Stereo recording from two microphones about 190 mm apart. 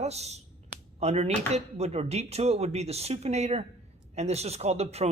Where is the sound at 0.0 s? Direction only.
35° right (ahead or behind).